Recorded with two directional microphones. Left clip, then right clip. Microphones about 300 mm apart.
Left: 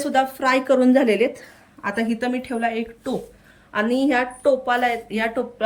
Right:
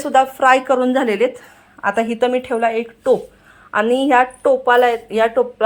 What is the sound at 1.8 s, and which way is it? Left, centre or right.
Speech, centre.